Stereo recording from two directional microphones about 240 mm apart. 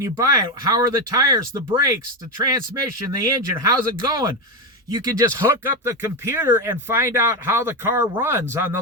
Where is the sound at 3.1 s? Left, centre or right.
Centre.